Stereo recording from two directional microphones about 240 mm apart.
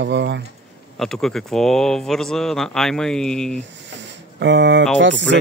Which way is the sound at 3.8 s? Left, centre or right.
Right.